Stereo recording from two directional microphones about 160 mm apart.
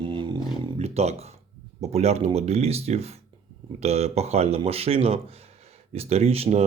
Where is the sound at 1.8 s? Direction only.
40° right (ahead or behind).